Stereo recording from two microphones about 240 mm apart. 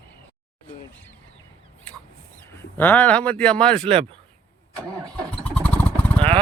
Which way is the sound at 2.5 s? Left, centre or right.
Centre.